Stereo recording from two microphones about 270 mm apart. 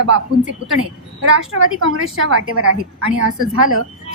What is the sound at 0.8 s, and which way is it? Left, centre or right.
A woman's voice, right.